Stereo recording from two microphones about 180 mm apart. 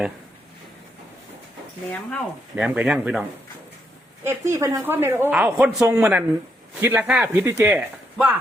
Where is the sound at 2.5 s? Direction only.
5° right (ahead or behind).